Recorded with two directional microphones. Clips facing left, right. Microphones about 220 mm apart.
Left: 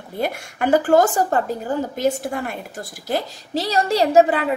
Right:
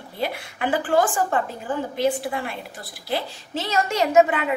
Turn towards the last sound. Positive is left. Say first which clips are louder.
# left 3 dB
turn(degrees=35)  # may be behind; listen again after turning